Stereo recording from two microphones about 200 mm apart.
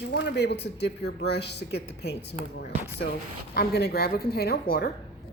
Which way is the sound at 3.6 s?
55° left (ahead or behind).